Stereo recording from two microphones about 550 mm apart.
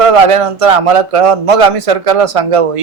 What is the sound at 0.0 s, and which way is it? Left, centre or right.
Speech, right.